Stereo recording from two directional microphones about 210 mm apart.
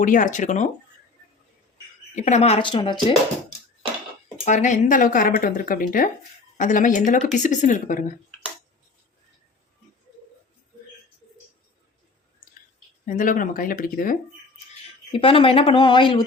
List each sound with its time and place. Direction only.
0.0 s speech: 40° left (ahead or behind)
2.1 s speech: 35° left (ahead or behind)
4.4 s speech: 35° left (ahead or behind)
13.1 s speech: 40° left (ahead or behind)
15.1 s speech: 25° left (ahead or behind)